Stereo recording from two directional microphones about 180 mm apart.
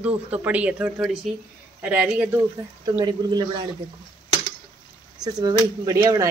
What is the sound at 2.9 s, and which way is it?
Speech, 20° right (ahead or behind).